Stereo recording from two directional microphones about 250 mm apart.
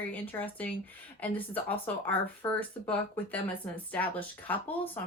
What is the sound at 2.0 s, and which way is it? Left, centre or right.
Speech, centre.